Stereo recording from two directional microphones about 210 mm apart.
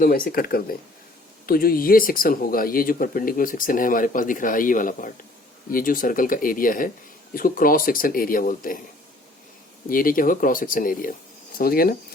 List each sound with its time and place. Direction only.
0.0 s speech: 45° left (ahead or behind)
9.9 s speech: 40° left (ahead or behind)